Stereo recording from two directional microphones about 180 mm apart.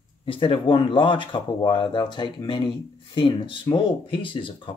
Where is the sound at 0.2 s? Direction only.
30° left (ahead or behind).